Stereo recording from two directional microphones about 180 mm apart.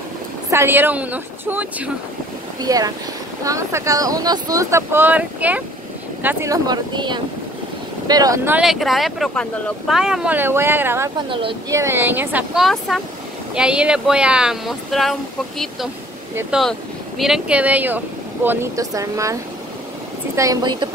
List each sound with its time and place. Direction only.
0.5 s speech: 15° right (ahead or behind)
2.6 s speech: 20° right (ahead or behind)
8.5 s speech: centre (ahead or behind)
11.1 s speech: 30° right (ahead or behind)
11.7 s speech: 15° right (ahead or behind)
20.3 s speech: 20° right (ahead or behind)